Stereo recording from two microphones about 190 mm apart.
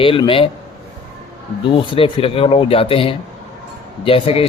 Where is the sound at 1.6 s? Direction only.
25° left (ahead or behind).